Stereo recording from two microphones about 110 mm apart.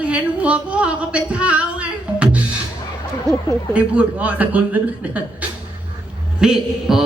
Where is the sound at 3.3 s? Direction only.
30° right (ahead or behind).